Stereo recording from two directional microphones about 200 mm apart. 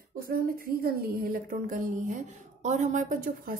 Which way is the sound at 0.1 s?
45° right (ahead or behind).